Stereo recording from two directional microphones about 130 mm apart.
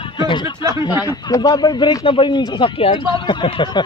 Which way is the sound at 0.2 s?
35° left (ahead or behind).